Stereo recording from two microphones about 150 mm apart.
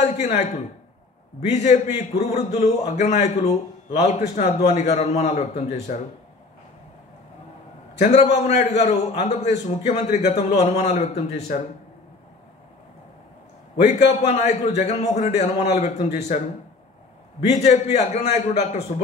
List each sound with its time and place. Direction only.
0.0 s a man's voice: 45° left (ahead or behind)
8.0 s a man's voice: 45° left (ahead or behind)
14.0 s a man's voice: 45° left (ahead or behind)
17.6 s a man's voice: 45° left (ahead or behind)